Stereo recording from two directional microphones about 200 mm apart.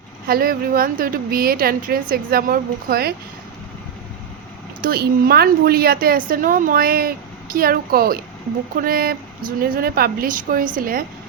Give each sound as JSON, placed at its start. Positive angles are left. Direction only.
{"t": 0.3, "sound": "a woman's voice", "side_deg": -50}
{"t": 4.8, "sound": "a woman's voice", "side_deg": -50}